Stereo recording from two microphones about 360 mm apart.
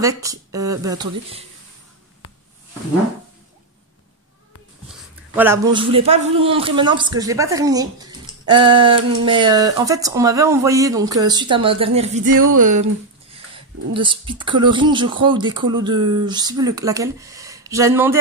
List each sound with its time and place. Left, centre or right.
0.0 s a man's voice: centre
5.3 s a man's voice: centre
12.5 s a sound: right
13.9 s a man's voice: centre